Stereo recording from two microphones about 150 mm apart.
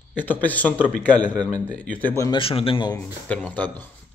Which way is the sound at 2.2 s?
35° left (ahead or behind).